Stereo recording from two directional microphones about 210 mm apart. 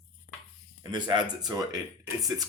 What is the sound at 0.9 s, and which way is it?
Speech, 20° right (ahead or behind).